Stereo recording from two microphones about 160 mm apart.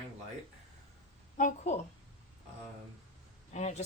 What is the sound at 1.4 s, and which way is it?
Speech, 50° left (ahead or behind).